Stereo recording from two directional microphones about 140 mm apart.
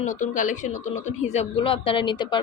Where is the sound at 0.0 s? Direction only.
65° left (ahead or behind).